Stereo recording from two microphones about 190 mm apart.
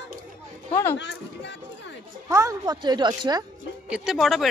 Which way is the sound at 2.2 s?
15° right (ahead or behind).